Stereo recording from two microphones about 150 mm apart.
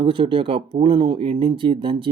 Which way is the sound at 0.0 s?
35° right (ahead or behind).